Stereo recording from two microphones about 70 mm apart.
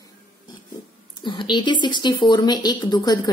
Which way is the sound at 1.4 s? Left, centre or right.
Left.